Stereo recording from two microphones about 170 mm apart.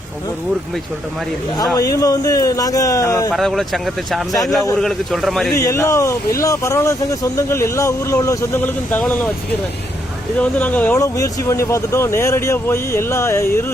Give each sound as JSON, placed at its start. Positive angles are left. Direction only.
{"t": 1.7, "sound": "speech", "side_deg": 20}
{"t": 3.3, "sound": "speech", "side_deg": 0}
{"t": 5.5, "sound": "speech", "side_deg": 15}
{"t": 10.3, "sound": "speech", "side_deg": 10}